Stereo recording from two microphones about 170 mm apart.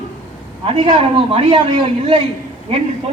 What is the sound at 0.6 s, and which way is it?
A man's voice, 30° right (ahead or behind).